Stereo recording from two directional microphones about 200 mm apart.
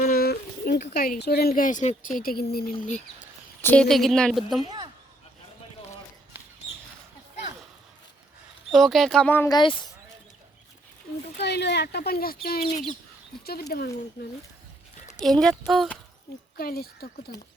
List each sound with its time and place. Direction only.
0.0 s a sound: 50° left (ahead or behind)
0.9 s a woman's voice: 50° left (ahead or behind)
3.6 s a woman's voice: 5° left (ahead or behind)
6.3 s a sound: 10° right (ahead or behind)
8.7 s a woman's voice: centre (ahead or behind)
9.6 s speech: 25° left (ahead or behind)
11.4 s a woman's voice: 55° left (ahead or behind)
15.2 s a woman's voice: centre (ahead or behind)
16.6 s a woman's voice: 50° left (ahead or behind)